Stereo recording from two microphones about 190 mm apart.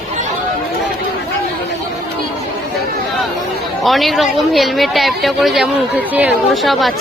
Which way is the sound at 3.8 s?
Centre (ahead or behind).